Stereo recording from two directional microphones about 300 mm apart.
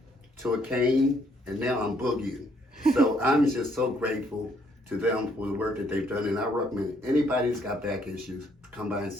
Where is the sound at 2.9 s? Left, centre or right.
Centre.